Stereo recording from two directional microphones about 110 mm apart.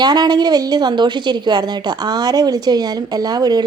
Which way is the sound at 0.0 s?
40° right (ahead or behind).